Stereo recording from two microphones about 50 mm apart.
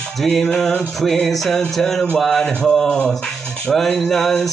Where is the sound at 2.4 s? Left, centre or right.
Centre.